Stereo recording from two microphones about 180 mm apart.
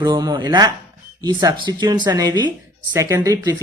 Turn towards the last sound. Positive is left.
turn(degrees=-20)  # may be behind; listen again after turning